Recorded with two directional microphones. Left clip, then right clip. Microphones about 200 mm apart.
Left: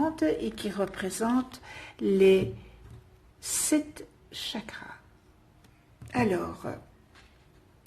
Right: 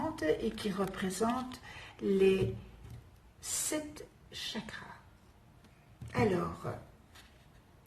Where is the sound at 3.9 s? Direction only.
45° left (ahead or behind).